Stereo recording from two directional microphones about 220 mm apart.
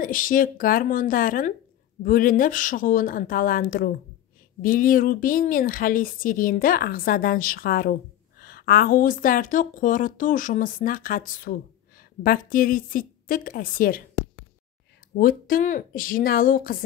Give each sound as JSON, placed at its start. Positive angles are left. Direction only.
{"t": 0.0, "sound": "a woman's voice", "side_deg": 40}
{"t": 15.1, "sound": "a woman's voice", "side_deg": 40}